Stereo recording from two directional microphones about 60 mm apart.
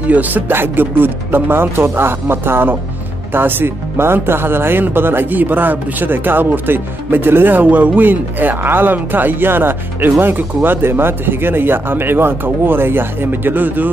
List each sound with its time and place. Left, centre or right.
0.1 s speech: right